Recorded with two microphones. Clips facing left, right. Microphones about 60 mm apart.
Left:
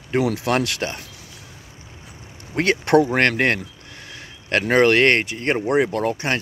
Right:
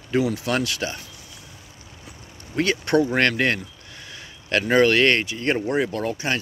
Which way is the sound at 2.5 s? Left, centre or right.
Left.